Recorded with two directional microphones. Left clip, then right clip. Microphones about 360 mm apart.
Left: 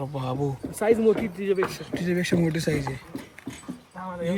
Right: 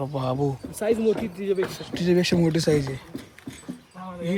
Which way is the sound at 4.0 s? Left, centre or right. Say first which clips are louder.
Left 3 dB; centre.